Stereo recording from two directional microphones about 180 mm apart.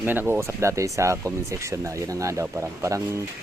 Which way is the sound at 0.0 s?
10° right (ahead or behind).